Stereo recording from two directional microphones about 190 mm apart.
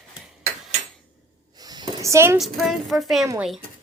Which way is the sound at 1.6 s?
20° right (ahead or behind).